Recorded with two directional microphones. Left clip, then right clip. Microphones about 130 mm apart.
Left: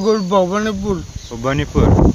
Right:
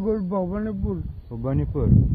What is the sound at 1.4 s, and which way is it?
Speech, centre (ahead or behind).